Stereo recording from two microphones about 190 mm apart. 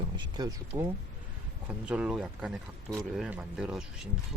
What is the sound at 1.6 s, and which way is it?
Speech, 5° right (ahead or behind).